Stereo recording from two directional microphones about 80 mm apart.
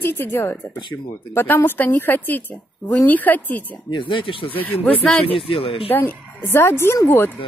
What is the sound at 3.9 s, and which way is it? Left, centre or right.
Speech, left.